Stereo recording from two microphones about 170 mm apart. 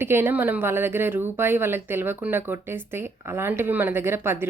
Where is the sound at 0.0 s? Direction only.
15° right (ahead or behind).